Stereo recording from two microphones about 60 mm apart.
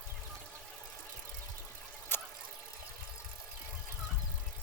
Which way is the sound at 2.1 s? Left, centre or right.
Left.